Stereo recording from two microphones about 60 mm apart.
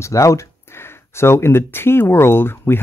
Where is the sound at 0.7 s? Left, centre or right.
Left.